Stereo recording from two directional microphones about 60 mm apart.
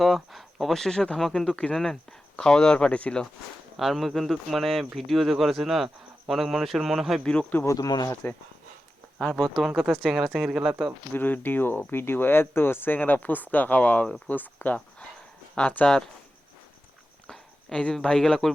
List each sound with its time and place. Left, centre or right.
0.0 s speech: centre
3.8 s speech: centre
7.8 s speech: left
9.2 s speech: centre
9.6 s speech: centre
11.1 s speech: left
17.2 s speech: centre